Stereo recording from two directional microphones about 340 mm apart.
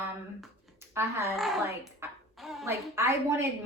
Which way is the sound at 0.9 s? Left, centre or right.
Centre.